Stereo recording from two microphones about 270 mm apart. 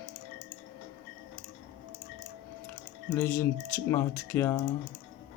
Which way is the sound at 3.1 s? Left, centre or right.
Centre.